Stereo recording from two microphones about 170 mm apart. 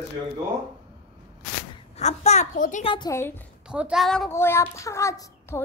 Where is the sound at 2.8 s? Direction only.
30° left (ahead or behind).